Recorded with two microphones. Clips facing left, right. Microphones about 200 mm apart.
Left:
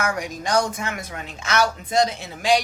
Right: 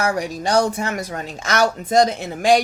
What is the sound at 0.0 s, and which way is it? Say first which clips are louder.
A woman's voice: right 4 dB; 35° right (ahead or behind).